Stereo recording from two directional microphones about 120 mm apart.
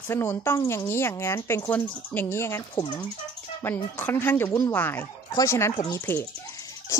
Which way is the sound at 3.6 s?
20° left (ahead or behind).